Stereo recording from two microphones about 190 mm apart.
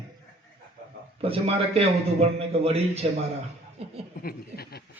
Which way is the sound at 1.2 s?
30° right (ahead or behind).